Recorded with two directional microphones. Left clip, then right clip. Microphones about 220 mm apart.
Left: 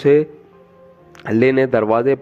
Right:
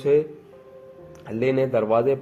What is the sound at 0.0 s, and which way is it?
A man's voice, 45° left (ahead or behind).